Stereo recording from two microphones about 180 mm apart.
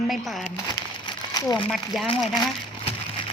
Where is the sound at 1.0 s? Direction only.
20° left (ahead or behind).